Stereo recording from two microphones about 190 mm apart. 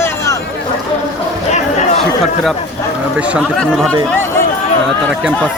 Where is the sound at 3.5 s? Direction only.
5° left (ahead or behind).